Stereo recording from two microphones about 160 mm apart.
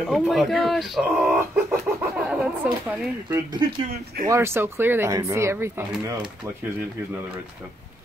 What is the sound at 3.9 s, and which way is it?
Speech, 65° right (ahead or behind).